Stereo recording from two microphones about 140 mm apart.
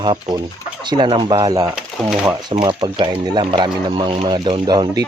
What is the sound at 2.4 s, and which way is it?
Speech, 30° right (ahead or behind).